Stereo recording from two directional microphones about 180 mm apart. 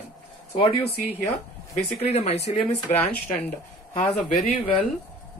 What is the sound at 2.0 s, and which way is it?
Speech, 35° left (ahead or behind).